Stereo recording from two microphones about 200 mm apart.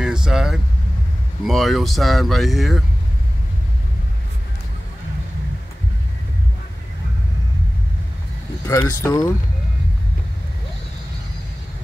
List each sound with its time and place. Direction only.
0.0 s vehicle: 5° right (ahead or behind)
1.4 s speech: centre (ahead or behind)
8.6 s speech: 15° left (ahead or behind)